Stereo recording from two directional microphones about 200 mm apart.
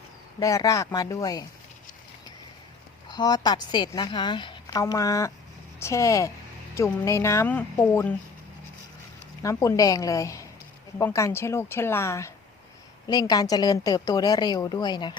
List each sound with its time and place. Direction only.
0.3 s a woman's voice: 15° left (ahead or behind)
3.1 s a woman's voice: 20° left (ahead or behind)
9.4 s a woman's voice: 15° left (ahead or behind)